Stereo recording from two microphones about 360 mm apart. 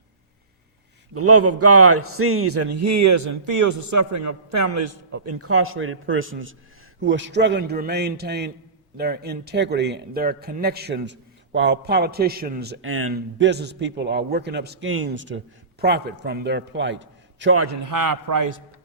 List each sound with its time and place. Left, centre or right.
1.1 s a man's voice: right
17.8 s a man's voice: right